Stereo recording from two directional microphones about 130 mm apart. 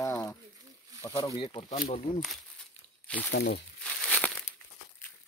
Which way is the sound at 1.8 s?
55° left (ahead or behind).